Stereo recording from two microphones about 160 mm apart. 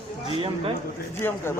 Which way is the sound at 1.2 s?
15° left (ahead or behind).